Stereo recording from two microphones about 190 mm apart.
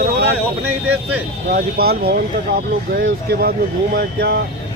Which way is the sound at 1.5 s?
50° right (ahead or behind).